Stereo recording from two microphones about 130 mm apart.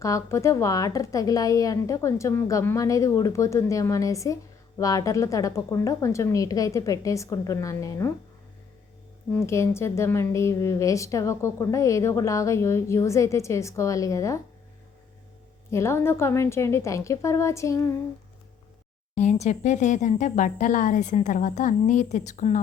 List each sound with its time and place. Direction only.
0.0 s a woman's voice: 20° left (ahead or behind)
9.5 s a woman's voice: 20° left (ahead or behind)
15.7 s a woman's voice: 20° left (ahead or behind)
19.1 s speech: 60° left (ahead or behind)